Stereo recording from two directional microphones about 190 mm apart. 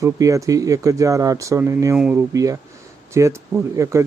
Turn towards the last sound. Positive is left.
turn(degrees=-15)  # may be behind; listen again after turning